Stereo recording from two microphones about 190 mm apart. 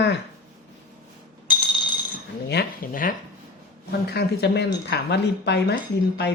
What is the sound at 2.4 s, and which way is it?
Speech, 50° left (ahead or behind).